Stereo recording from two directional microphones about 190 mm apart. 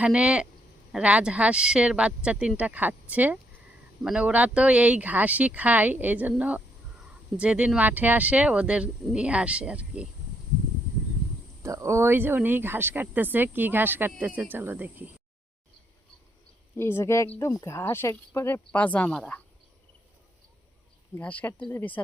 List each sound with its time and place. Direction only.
0.0 s speech: 5° right (ahead or behind)
11.6 s speech: 15° right (ahead or behind)
16.7 s speech: 15° left (ahead or behind)
21.2 s speech: 10° left (ahead or behind)